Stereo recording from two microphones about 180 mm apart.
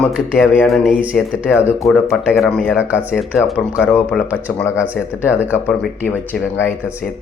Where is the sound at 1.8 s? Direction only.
Centre (ahead or behind).